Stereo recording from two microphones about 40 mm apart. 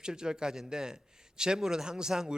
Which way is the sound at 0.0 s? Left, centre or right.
Centre.